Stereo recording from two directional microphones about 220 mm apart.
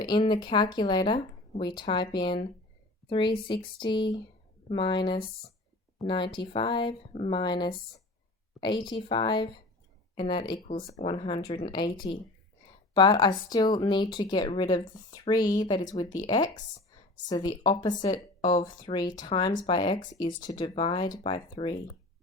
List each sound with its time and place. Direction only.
0.0 s speech: 20° left (ahead or behind)
8.9 s speech: 25° left (ahead or behind)
10.7 s speech: 40° left (ahead or behind)
11.0 s speech: 25° left (ahead or behind)